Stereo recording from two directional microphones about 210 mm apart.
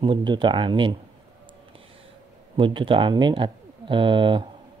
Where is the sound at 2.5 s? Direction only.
25° right (ahead or behind).